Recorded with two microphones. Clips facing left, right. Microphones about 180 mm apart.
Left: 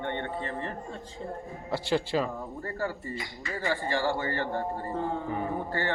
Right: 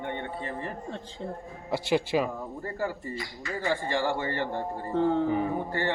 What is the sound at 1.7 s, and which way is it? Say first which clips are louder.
Speech: right 2 dB; 15° right (ahead or behind).